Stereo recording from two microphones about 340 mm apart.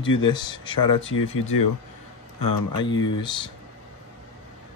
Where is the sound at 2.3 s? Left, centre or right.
Left.